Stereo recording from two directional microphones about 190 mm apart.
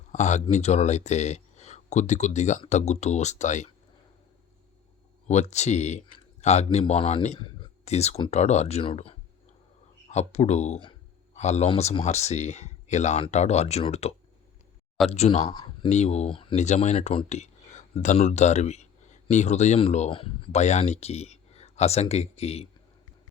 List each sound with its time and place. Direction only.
0.1 s speech: 40° left (ahead or behind)
5.3 s speech: 35° left (ahead or behind)
15.1 s speech: 35° left (ahead or behind)
15.4 s speech: 20° left (ahead or behind)
15.9 s speech: 35° left (ahead or behind)